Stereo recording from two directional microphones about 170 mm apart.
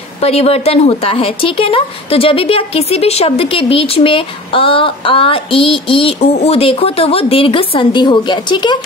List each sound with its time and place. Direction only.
0.2 s speech: 40° left (ahead or behind)